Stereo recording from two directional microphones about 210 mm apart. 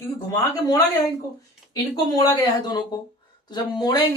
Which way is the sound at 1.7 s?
20° left (ahead or behind).